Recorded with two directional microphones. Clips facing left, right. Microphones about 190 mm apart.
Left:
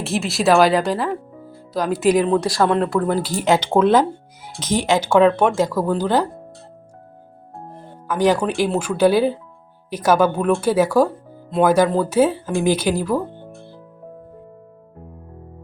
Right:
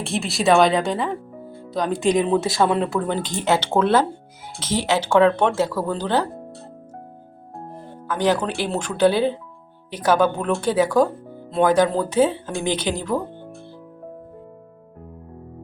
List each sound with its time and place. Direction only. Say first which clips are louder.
0.0 s a woman's voice: left 2 dB; centre (ahead or behind)
8.0 s a woman's voice: left 3 dB; 10° left (ahead or behind)